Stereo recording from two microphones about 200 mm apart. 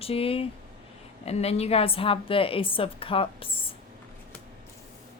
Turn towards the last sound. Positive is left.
turn(degrees=25)  # may be behind; listen again after turning